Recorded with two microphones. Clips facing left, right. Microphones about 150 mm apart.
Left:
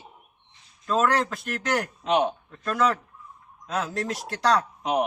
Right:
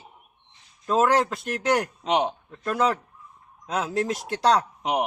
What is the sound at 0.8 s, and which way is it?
Speech, 20° right (ahead or behind).